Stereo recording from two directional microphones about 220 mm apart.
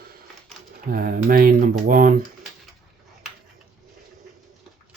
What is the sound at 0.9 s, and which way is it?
Speech, 40° right (ahead or behind).